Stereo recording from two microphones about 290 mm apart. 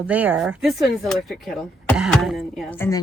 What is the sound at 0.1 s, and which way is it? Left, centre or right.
A woman's voice, centre.